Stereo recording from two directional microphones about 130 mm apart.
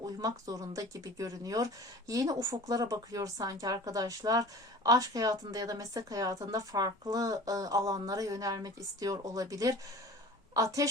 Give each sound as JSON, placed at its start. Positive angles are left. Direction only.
{"t": 0.2, "sound": "speech", "side_deg": -25}